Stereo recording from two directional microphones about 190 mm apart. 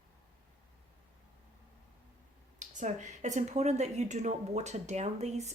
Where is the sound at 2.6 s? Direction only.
40° right (ahead or behind).